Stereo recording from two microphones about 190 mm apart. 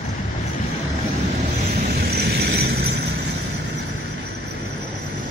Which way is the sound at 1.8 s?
55° right (ahead or behind).